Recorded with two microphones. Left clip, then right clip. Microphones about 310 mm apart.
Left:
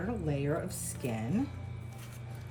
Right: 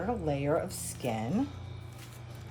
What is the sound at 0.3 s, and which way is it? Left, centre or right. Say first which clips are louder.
Speech: right 2 dB; centre.